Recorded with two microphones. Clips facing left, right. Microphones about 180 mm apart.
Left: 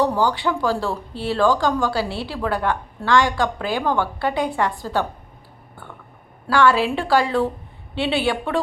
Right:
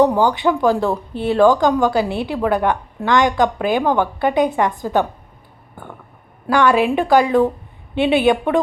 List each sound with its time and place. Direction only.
0.0 s speech: 20° right (ahead or behind)
6.5 s speech: 20° right (ahead or behind)